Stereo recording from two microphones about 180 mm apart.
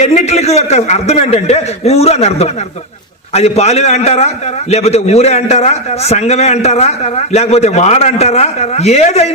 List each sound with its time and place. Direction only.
0.0 s a man's voice: 40° left (ahead or behind)